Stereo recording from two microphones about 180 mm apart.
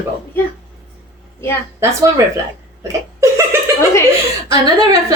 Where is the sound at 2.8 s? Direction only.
15° right (ahead or behind).